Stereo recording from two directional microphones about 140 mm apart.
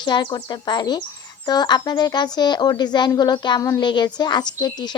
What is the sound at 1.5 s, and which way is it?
Speech, 30° left (ahead or behind).